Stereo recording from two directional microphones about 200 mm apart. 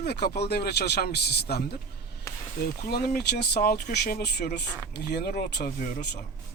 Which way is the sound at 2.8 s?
50° left (ahead or behind).